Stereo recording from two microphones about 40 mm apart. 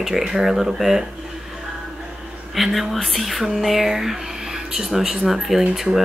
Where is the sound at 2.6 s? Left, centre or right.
Centre.